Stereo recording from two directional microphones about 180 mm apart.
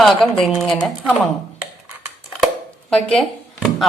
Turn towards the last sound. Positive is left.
turn(degrees=0)  # may be behind; listen again after turning